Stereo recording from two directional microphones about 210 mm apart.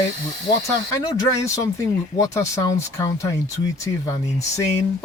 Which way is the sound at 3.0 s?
15° left (ahead or behind).